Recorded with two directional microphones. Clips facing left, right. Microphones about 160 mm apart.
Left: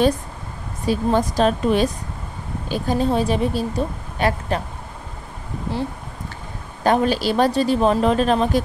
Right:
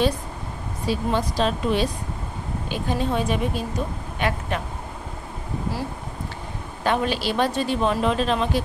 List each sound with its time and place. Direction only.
0.8 s a woman's voice: 45° left (ahead or behind)
6.8 s a woman's voice: 40° left (ahead or behind)